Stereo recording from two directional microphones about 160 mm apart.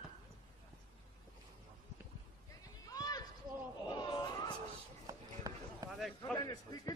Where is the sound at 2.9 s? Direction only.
25° left (ahead or behind).